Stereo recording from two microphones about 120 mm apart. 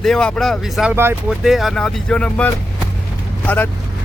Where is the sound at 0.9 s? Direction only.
20° right (ahead or behind).